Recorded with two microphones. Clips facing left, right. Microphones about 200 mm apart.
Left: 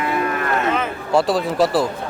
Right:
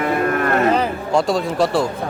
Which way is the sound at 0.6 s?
35° right (ahead or behind).